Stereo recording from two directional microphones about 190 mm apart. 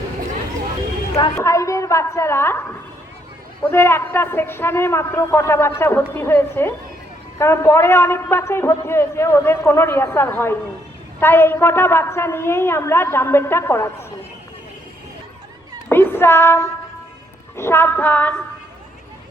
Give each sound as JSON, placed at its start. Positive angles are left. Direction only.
{"t": 1.5, "sound": "a woman's voice", "side_deg": 15}
{"t": 15.9, "sound": "a man's voice", "side_deg": 10}